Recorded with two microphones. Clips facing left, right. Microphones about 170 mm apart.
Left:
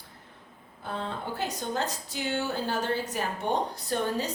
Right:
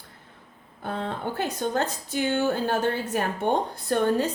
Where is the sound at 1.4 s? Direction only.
55° right (ahead or behind).